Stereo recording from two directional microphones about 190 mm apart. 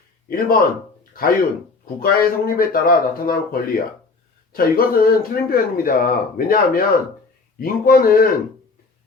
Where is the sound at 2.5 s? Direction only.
50° left (ahead or behind).